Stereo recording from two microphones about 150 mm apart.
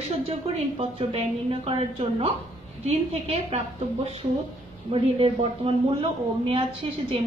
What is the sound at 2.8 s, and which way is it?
Speech, 45° right (ahead or behind).